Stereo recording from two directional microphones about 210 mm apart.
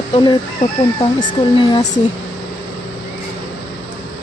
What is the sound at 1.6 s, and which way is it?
Speech, 30° left (ahead or behind).